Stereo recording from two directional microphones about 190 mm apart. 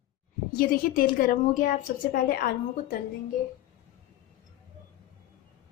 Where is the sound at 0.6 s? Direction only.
50° left (ahead or behind).